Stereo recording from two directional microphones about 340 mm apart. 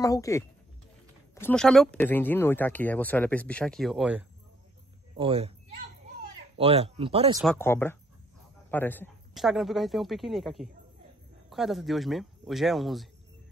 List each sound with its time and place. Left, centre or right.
0.0 s speech: centre
5.1 s speech: centre
6.6 s speech: centre
7.4 s speech: centre